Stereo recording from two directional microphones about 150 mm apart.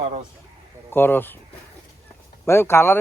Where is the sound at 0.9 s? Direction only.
15° left (ahead or behind).